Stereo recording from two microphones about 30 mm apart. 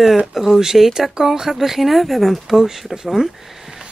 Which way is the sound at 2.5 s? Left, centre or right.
Right.